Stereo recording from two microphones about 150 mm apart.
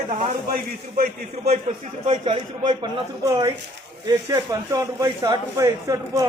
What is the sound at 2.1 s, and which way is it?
Speech, 30° right (ahead or behind).